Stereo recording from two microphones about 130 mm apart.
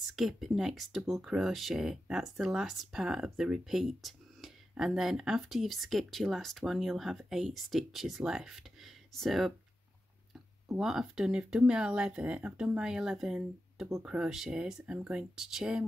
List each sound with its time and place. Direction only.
0.1 s speech: centre (ahead or behind)
10.8 s speech: 5° right (ahead or behind)